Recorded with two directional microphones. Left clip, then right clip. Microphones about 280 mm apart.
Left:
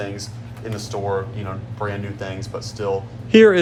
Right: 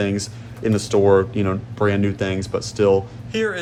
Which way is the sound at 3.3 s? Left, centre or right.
Left.